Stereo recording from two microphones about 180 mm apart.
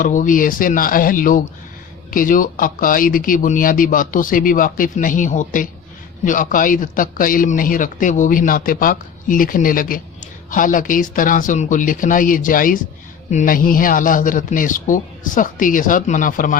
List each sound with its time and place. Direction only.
0.0 s a man's voice: 45° left (ahead or behind)